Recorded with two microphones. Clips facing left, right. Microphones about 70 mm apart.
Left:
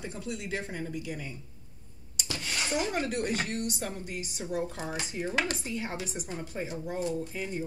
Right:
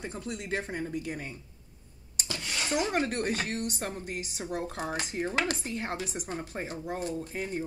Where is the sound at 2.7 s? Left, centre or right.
Right.